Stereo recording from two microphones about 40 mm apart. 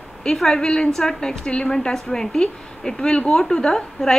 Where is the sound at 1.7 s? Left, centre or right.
Centre.